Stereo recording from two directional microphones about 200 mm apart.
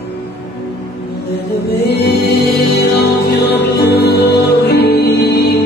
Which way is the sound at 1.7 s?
55° left (ahead or behind).